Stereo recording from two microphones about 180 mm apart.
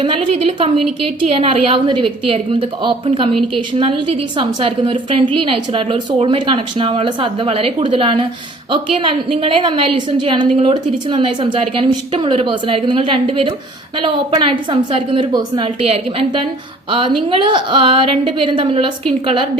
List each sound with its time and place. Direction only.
0.0 s a woman's voice: 30° right (ahead or behind)